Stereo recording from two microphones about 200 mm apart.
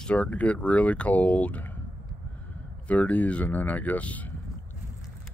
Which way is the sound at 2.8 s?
5° left (ahead or behind).